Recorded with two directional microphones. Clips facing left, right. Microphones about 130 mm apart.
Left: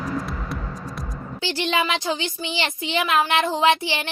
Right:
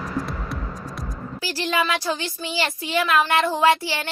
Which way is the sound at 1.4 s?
20° left (ahead or behind).